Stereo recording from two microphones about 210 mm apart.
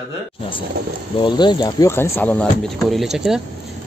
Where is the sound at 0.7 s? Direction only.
50° right (ahead or behind).